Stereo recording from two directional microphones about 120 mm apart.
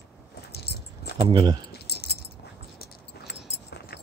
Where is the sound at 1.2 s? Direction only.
40° right (ahead or behind).